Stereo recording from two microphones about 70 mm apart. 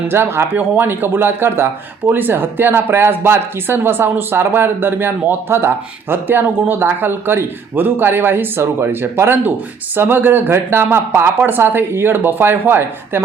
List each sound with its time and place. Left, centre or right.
0.1 s speech: right